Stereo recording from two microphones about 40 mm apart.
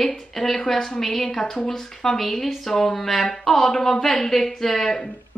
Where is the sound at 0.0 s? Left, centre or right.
Centre.